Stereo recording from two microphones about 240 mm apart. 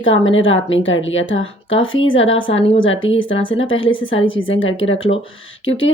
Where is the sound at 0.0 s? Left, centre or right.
Left.